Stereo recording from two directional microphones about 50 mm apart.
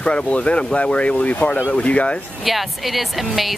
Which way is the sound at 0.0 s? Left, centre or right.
Centre.